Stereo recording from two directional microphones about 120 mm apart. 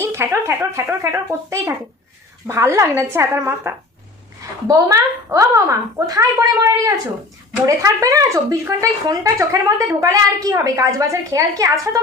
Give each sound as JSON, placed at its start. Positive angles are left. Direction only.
{"t": 0.0, "sound": "speech", "side_deg": -20}